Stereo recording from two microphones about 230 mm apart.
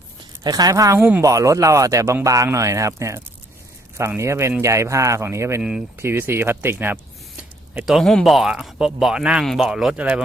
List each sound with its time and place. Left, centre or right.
0.4 s speech: centre